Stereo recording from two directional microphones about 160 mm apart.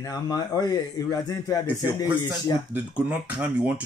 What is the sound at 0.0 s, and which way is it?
A man's voice, 20° left (ahead or behind).